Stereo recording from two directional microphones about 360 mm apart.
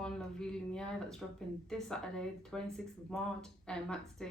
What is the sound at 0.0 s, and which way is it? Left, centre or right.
Speech, centre.